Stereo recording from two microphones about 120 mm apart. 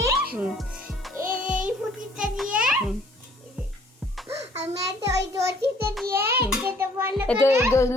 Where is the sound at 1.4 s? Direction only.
90° right.